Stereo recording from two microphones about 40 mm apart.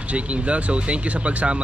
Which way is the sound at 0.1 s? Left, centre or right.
Right.